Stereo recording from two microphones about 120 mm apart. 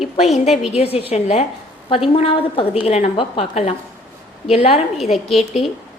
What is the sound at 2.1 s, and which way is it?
Speech, 50° left (ahead or behind).